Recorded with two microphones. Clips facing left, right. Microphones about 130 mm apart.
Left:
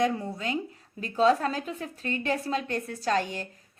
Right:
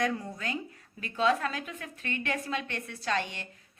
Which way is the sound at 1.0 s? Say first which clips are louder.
Left 5 dB; 35° left (ahead or behind).